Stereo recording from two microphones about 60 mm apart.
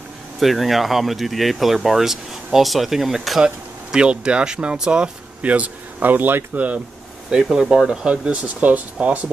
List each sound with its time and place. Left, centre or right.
0.4 s speech: centre; by 6.8 s right
7.2 s speech: centre